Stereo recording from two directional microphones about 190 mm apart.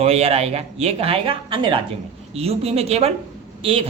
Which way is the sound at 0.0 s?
30° right (ahead or behind).